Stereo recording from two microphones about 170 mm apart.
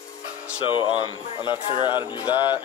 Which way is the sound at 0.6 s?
30° left (ahead or behind).